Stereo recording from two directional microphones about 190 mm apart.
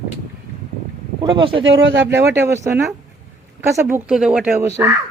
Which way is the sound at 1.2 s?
25° right (ahead or behind).